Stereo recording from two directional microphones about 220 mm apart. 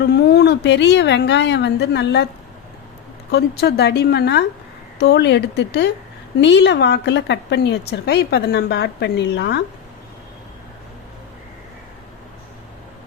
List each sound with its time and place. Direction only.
0.0 s a woman's voice: 50° left (ahead or behind)
3.3 s a woman's voice: 45° left (ahead or behind)